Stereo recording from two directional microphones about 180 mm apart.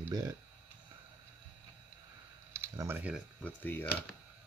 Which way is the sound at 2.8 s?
10° right (ahead or behind).